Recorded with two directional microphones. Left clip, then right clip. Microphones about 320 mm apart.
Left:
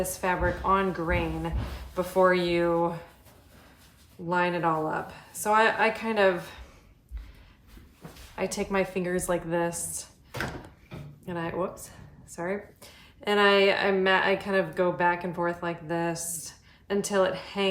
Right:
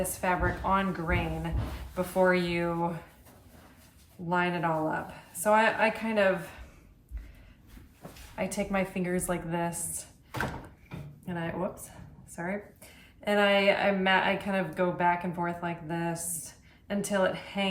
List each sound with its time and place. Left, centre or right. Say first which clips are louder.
0.2 s speech: left 1 dB; centre
4.3 s speech: left 3 dB; centre
8.4 s speech: left 3 dB; centre
11.3 s speech: left 3 dB; centre